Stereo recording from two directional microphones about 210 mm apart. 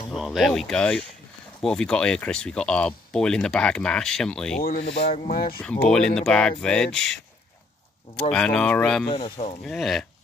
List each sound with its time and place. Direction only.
0.1 s speech: centre (ahead or behind)
4.6 s speech: 45° left (ahead or behind)
5.0 s speech: 30° left (ahead or behind)
5.3 s speech: 45° left (ahead or behind)
5.6 s speech: 5° left (ahead or behind)
8.3 s speech: 5° left (ahead or behind)
9.1 s speech: 25° left (ahead or behind)
9.7 s speech: centre (ahead or behind)